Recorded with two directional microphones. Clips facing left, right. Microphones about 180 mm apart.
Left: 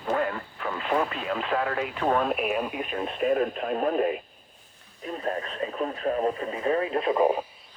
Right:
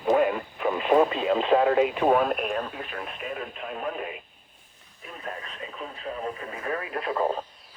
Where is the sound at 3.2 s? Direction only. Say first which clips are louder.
Left 14 dB; 45° left (ahead or behind).